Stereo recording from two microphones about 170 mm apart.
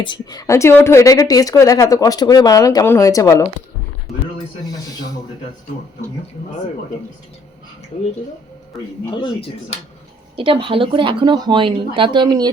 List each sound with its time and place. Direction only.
0.0 s a woman's voice: 25° left (ahead or behind)
10.3 s speech: 30° right (ahead or behind)